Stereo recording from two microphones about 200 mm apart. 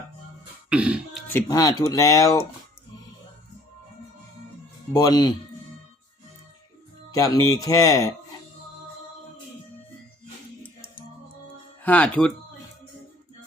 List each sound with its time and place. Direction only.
0.7 s throat clearing: 5° right (ahead or behind)
1.3 s speech: 15° left (ahead or behind)
4.9 s speech: 20° left (ahead or behind)
7.1 s speech: 15° left (ahead or behind)
11.8 s speech: 5° left (ahead or behind)